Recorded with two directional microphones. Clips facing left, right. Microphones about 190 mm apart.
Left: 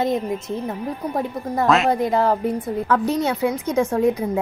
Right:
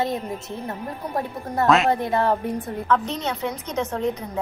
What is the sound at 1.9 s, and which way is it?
A woman's voice, 15° left (ahead or behind).